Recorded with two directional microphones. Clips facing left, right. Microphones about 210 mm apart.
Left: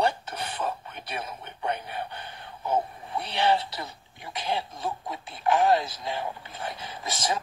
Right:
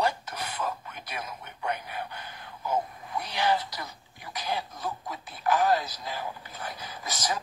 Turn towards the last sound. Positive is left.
turn(degrees=25)  # may be behind; listen again after turning